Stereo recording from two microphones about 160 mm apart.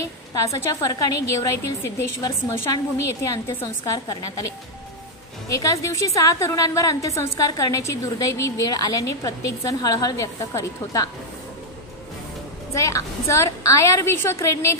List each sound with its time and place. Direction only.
0.3 s a woman's voice: 20° left (ahead or behind)
5.5 s a woman's voice: 20° left (ahead or behind)
12.7 s a woman's voice: 20° left (ahead or behind)